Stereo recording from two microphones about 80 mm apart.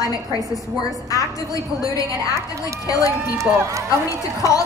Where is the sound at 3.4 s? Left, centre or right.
Right.